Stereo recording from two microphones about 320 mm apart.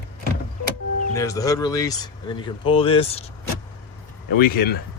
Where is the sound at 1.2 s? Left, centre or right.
Centre.